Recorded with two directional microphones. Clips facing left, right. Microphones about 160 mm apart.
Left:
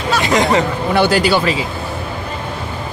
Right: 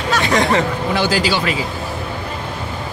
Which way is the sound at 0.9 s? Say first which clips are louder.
Left 5 dB; 60° left (ahead or behind).